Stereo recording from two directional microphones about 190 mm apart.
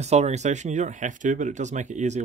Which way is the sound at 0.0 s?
35° right (ahead or behind).